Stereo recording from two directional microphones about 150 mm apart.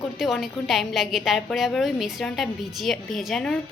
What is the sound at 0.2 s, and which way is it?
A woman's voice, centre (ahead or behind).